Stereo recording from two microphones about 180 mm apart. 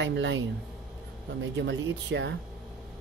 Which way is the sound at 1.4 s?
80° right.